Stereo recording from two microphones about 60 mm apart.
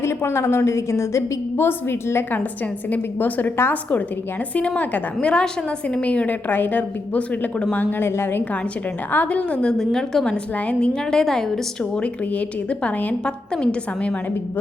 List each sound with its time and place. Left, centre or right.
0.0 s a woman's voice: left
2.9 s a woman's voice: left
4.5 s a woman's voice: left
9.1 s a woman's voice: left
9.7 s a woman's voice: centre